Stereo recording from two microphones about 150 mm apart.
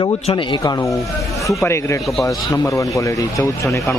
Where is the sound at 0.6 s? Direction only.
25° left (ahead or behind).